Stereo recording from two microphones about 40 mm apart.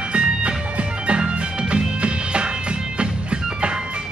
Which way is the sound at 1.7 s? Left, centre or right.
Right.